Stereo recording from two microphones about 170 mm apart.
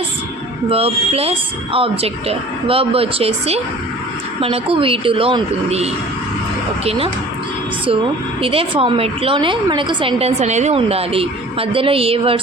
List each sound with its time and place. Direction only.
0.7 s a woman's voice: 35° right (ahead or behind)
8.4 s a woman's voice: 30° right (ahead or behind)